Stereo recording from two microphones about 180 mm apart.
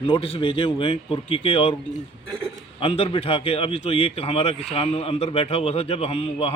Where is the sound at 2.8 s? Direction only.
30° left (ahead or behind).